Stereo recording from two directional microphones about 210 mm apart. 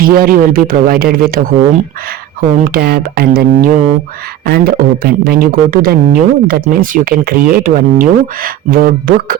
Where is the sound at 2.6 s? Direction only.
45° right (ahead or behind).